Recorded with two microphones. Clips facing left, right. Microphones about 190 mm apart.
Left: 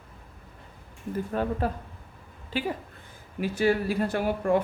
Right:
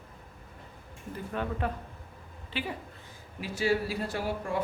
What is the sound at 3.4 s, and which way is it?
Speech, 55° left (ahead or behind).